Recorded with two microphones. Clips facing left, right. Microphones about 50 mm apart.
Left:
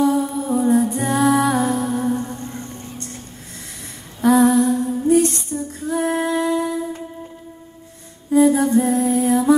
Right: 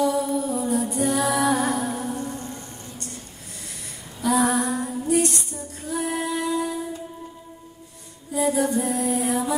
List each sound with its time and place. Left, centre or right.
0.0 s music: left
4.2 s humming: left
4.5 s music: right
5.0 s female singing: left
8.3 s music: left
9.3 s humming: left